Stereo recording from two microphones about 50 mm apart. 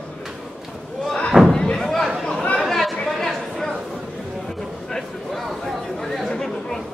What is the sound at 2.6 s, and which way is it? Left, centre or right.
Chatter, centre.